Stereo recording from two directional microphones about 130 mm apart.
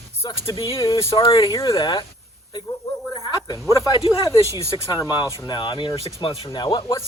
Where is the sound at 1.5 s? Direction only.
25° left (ahead or behind).